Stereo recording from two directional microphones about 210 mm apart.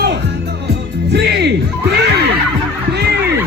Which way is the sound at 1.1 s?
50° right (ahead or behind).